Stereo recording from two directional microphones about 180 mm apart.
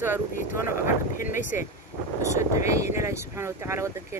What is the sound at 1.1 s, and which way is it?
Speech, 45° left (ahead or behind).